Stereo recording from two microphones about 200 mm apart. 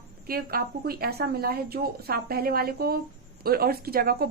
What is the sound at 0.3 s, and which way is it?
Speech, 50° right (ahead or behind).